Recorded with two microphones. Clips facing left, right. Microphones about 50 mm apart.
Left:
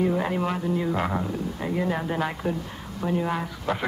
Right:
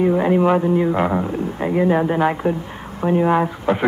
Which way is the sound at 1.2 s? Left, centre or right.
Right.